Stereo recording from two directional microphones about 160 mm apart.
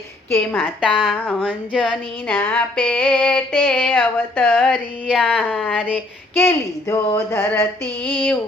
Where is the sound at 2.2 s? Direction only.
10° left (ahead or behind).